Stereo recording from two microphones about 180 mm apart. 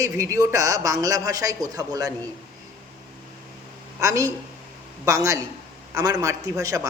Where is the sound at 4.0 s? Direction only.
15° right (ahead or behind).